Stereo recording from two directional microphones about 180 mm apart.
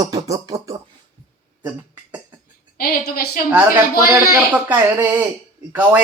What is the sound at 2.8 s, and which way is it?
Speech, 55° left (ahead or behind).